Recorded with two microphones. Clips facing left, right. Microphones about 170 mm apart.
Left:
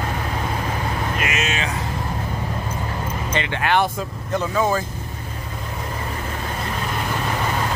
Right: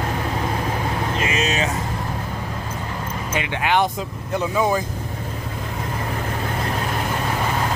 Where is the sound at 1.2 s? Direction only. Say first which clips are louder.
Right 2 dB; 30° right (ahead or behind).